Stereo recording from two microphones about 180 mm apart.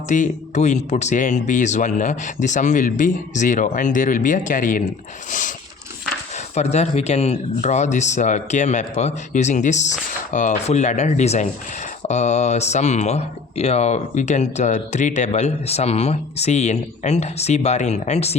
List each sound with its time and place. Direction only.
0.1 s speech: 40° left (ahead or behind)